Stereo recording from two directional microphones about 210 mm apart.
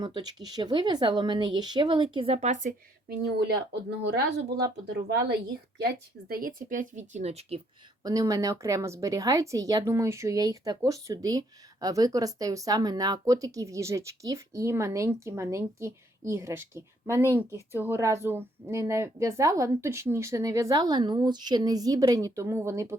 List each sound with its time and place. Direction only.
0.0 s speech: 20° right (ahead or behind)
3.1 s a woman's voice: 50° right (ahead or behind); by 7.6 s 30° right (ahead or behind)
8.0 s a woman's voice: 15° right (ahead or behind)